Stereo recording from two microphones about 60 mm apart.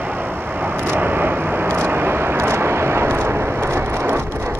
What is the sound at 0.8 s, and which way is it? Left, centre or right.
Vehicle, right.